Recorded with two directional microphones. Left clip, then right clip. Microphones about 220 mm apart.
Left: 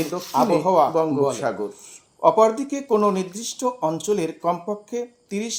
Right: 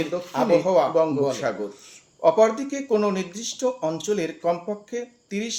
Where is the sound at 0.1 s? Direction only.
50° left (ahead or behind).